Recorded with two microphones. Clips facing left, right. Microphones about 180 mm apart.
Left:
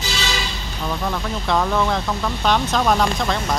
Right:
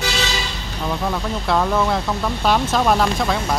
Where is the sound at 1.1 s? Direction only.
5° right (ahead or behind).